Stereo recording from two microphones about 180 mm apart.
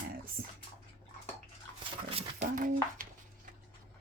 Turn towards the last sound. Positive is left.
turn(degrees=-50)  # may be behind; listen again after turning